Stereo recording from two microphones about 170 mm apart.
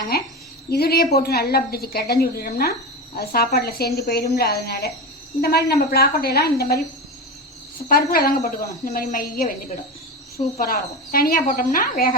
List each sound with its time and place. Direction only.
0.1 s a woman's voice: 65° left (ahead or behind)
7.9 s a woman's voice: 60° left (ahead or behind)
10.6 s a woman's voice: 60° left (ahead or behind)